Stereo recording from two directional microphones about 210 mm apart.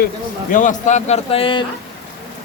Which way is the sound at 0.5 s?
35° left (ahead or behind).